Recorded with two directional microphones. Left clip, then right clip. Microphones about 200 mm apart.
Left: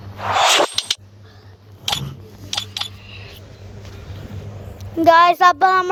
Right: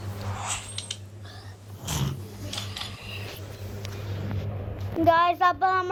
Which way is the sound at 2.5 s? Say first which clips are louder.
Left 11 dB; 50° left (ahead or behind).